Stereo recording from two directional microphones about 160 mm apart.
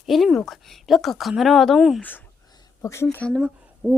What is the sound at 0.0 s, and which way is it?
Speech, centre (ahead or behind).